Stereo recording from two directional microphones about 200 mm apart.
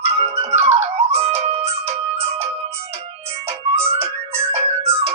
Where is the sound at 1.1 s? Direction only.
30° right (ahead or behind).